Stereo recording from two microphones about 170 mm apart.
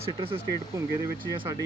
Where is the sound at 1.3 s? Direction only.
30° right (ahead or behind).